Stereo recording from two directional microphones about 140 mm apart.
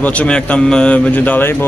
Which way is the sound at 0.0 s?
10° left (ahead or behind).